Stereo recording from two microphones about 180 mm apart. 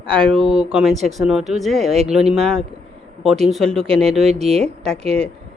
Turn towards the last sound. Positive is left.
turn(degrees=5)  # may be behind; listen again after turning